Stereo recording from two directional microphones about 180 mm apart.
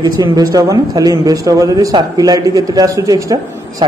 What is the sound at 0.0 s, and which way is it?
A man's voice, 20° right (ahead or behind).